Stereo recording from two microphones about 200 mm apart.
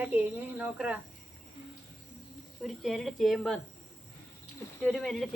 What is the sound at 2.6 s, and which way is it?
Speech, centre (ahead or behind).